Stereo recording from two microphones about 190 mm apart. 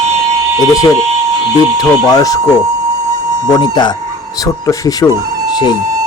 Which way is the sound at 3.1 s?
15° right (ahead or behind).